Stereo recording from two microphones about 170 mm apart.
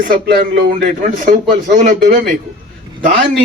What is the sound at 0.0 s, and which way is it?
A man's voice, 60° right (ahead or behind).